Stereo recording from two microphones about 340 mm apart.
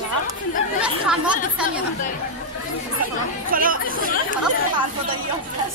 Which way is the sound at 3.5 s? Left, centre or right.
Right.